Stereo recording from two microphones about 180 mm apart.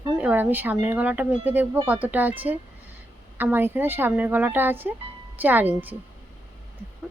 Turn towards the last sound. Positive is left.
turn(degrees=-10)  # may be behind; listen again after turning